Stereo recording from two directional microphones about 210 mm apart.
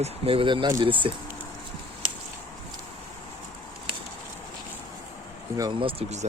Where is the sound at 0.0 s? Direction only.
25° right (ahead or behind).